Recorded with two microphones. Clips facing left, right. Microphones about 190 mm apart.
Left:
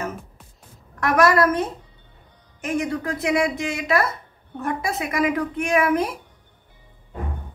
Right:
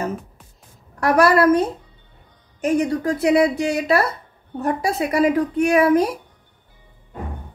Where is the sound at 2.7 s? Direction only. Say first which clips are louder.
Right 4 dB; 35° right (ahead or behind).